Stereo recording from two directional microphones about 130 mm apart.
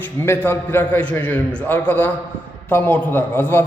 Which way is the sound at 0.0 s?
15° left (ahead or behind).